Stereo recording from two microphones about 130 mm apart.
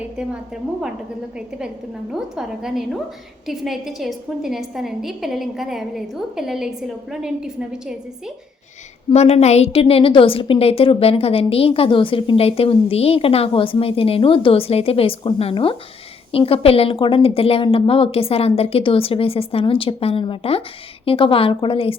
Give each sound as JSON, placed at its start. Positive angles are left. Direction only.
{"t": 0.2, "sound": "a woman's voice", "side_deg": -5}
{"t": 2.3, "sound": "a woman's voice", "side_deg": -5}
{"t": 9.1, "sound": "a woman's voice", "side_deg": 55}